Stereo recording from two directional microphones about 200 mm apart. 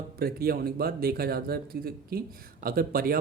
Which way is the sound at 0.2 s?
50° right (ahead or behind).